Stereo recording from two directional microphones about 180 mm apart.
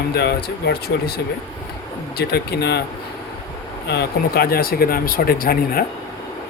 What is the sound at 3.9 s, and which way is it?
Speech, 65° left (ahead or behind).